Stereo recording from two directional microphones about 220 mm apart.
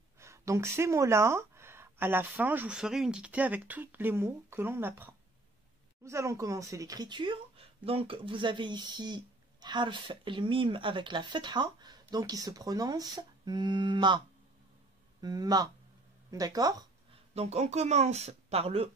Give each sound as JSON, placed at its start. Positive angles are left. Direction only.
{"t": 0.2, "sound": "speech", "side_deg": -15}
{"t": 17.3, "sound": "speech", "side_deg": -30}